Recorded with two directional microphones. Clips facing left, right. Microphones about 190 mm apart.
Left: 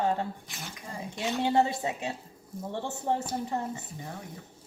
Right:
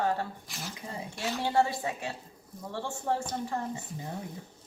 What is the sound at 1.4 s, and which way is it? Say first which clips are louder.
Speech: left 2 dB; 20° left (ahead or behind).